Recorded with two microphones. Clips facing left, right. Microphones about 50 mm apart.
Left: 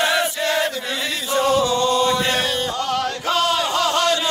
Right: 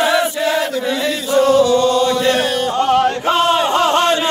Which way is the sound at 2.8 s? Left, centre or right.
Right.